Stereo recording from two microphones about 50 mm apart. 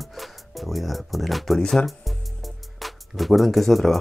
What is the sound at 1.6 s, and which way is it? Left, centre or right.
Speech, centre.